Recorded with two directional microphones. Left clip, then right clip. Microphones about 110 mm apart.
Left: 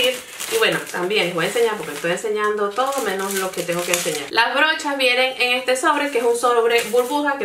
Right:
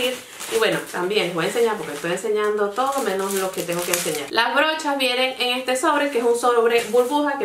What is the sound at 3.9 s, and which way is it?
Speech, 25° right (ahead or behind).